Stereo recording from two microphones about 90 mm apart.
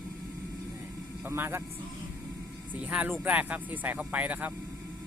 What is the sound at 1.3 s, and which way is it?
Speech, 25° right (ahead or behind).